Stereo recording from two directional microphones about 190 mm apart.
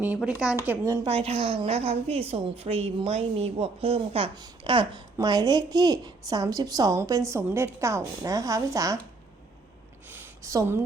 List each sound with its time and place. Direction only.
0.0 s speech: 5° right (ahead or behind)
1.0 s a woman's voice: 30° right (ahead or behind)
10.1 s a sound: 15° right (ahead or behind)